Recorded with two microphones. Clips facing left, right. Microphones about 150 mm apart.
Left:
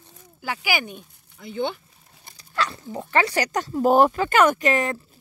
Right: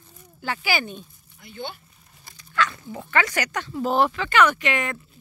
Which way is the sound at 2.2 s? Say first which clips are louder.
Right 2 dB; 35° left (ahead or behind).